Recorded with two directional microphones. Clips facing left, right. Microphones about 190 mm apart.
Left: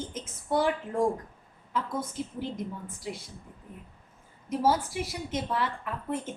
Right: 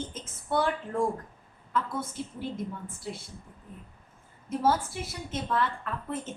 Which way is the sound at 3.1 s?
15° left (ahead or behind).